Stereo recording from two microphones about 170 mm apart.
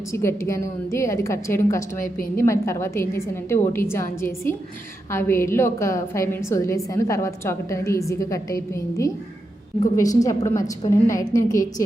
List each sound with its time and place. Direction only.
0.1 s a woman's voice: 15° left (ahead or behind)